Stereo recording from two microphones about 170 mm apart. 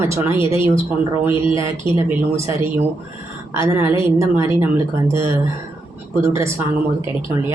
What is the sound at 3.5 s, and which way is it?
A woman's voice, 15° right (ahead or behind).